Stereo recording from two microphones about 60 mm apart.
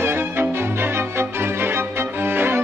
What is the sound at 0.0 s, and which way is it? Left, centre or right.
Music, right.